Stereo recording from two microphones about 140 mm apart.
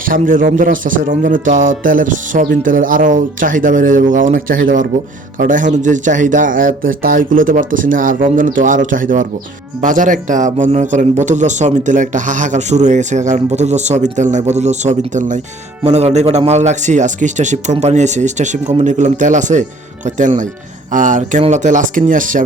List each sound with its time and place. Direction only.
0.0 s a man's voice: 75° right (ahead or behind)
15.8 s a man's voice: 50° right (ahead or behind); by 22.4 s 70° right (ahead or behind)